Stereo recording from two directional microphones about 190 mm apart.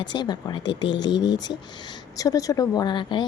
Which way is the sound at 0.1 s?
20° left (ahead or behind).